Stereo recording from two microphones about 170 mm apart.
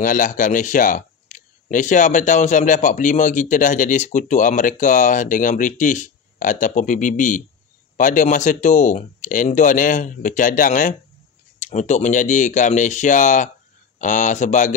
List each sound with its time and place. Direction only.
0.0 s speech: 50° left (ahead or behind)